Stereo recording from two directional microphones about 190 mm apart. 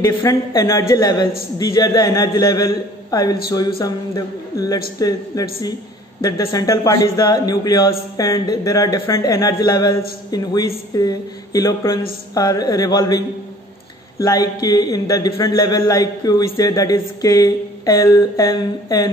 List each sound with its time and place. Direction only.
0.0 s a man's voice: 15° left (ahead or behind)
14.2 s a man's voice: 20° left (ahead or behind)